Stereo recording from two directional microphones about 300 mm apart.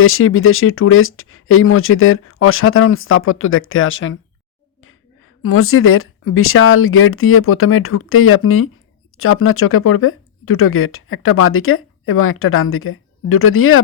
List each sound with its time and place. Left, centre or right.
0.0 s speech: left
5.4 s speech: left